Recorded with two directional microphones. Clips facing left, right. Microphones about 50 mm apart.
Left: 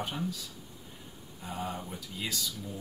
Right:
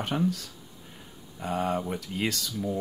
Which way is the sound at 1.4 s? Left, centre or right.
Right.